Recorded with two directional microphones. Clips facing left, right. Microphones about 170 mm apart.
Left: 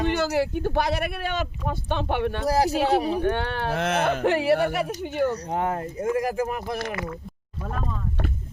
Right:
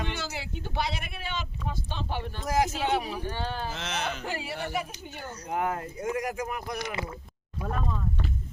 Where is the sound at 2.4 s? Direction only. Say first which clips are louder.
Left 4 dB; 35° left (ahead or behind).